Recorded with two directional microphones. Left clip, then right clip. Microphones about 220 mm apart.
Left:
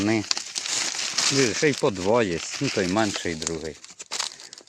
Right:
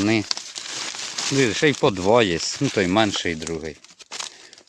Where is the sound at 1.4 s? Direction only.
30° right (ahead or behind).